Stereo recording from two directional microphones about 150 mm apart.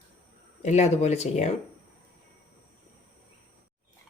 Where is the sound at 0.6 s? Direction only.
50° left (ahead or behind).